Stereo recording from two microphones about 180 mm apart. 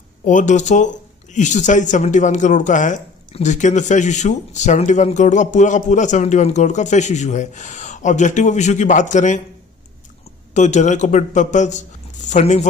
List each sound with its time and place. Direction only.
0.2 s speech: 45° left (ahead or behind)
10.5 s speech: 40° left (ahead or behind)